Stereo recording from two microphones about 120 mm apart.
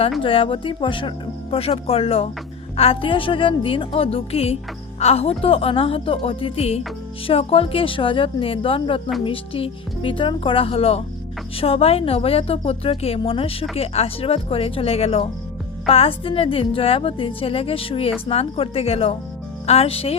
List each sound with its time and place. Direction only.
0.2 s speech: 45° left (ahead or behind)